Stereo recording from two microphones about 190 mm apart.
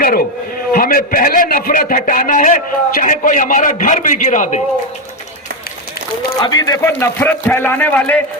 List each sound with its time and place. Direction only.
0.7 s a man's voice: 50° left (ahead or behind)
6.4 s a man's voice: 20° left (ahead or behind)